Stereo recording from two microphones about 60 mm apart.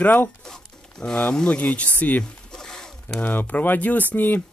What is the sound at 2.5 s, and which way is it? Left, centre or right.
Wild animals, centre.